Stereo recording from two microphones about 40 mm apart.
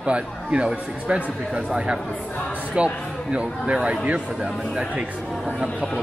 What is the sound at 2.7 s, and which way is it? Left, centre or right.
A man's voice, right.